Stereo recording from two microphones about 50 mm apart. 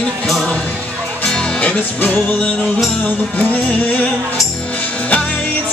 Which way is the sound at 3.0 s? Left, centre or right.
Left.